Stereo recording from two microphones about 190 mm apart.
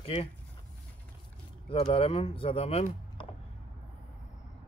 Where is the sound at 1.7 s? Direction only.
30° left (ahead or behind).